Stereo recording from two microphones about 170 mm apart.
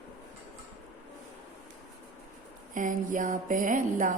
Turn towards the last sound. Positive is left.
turn(degrees=-50)  # may be behind; listen again after turning